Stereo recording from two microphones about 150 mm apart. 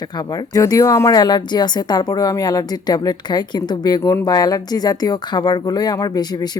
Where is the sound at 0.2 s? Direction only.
25° left (ahead or behind).